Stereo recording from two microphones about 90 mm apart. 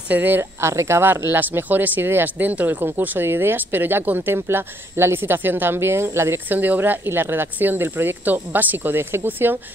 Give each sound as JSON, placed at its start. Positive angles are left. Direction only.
{"t": 0.1, "sound": "speech", "side_deg": -20}